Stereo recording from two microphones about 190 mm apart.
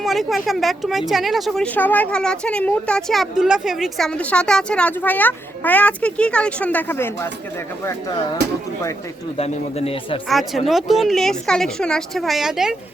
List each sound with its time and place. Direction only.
0.0 s speech: centre (ahead or behind)
9.4 s a man's voice: 30° left (ahead or behind)
10.2 s speech: centre (ahead or behind)